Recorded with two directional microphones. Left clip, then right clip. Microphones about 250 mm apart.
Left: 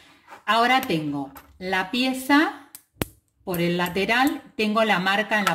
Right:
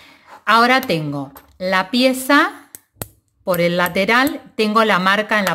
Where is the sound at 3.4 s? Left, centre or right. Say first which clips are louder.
Right 9 dB; right.